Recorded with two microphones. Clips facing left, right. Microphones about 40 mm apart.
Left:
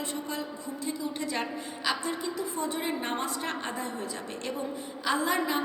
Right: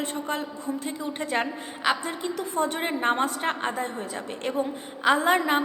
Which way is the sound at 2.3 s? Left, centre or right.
Right.